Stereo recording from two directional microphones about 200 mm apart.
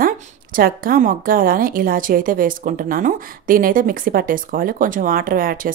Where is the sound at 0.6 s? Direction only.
45° right (ahead or behind).